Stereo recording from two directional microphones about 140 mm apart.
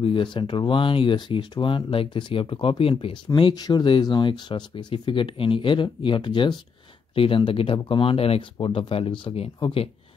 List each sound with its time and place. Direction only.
0.0 s speech: 35° left (ahead or behind)